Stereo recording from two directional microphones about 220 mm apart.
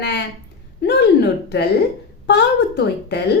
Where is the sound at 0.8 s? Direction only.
50° left (ahead or behind).